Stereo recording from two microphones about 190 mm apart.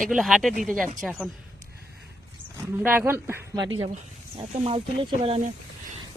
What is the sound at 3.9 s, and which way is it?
Speech, 30° right (ahead or behind).